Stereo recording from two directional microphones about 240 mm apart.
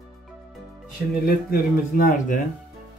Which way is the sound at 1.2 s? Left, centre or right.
Left.